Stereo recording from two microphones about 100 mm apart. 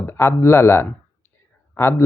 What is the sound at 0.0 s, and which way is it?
Speech, 25° left (ahead or behind).